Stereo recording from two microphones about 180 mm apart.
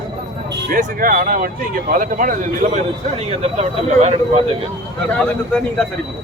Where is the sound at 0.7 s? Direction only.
50° right (ahead or behind).